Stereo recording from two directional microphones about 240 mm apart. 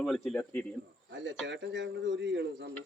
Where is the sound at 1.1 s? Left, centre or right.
Right.